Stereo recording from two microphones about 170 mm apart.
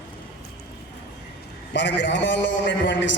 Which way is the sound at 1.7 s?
90° left.